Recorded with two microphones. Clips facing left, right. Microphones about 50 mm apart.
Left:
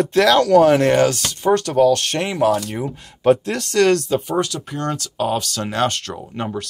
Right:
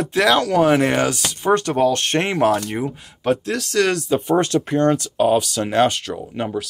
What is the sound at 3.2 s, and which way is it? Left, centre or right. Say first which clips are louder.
Speech: left 4 dB; centre.